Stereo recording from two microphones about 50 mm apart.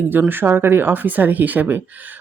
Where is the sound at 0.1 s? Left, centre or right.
Right.